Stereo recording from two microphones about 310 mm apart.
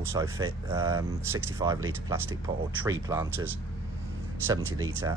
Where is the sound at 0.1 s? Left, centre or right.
Centre.